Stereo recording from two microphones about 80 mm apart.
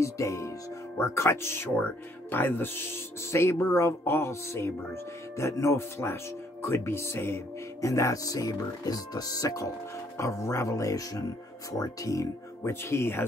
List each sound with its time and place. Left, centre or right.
0.0 s speech: left